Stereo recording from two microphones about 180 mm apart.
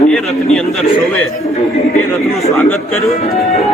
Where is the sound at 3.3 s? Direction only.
35° left (ahead or behind).